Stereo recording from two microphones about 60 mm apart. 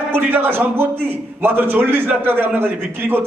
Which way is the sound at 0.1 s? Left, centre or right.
Right.